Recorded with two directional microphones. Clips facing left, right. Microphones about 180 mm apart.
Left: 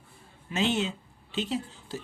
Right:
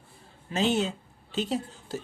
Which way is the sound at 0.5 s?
40° right (ahead or behind).